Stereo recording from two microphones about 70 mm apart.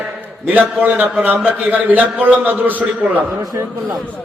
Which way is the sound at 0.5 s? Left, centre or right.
Right.